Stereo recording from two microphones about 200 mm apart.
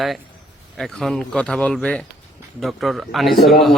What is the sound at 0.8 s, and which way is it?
Speech, centre (ahead or behind).